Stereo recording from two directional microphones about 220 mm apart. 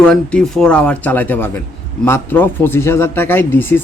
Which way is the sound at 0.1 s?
5° left (ahead or behind).